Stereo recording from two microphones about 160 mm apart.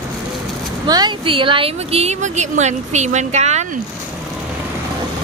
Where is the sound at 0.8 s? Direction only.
25° right (ahead or behind); by 3.7 s 45° right (ahead or behind).